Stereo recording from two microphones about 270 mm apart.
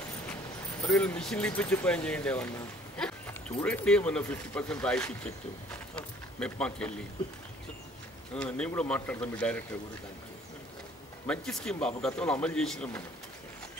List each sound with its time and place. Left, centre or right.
0.8 s speech: centre
3.0 s a sound: centre
3.6 s speech: centre
8.4 s speech: centre
11.2 s speech: centre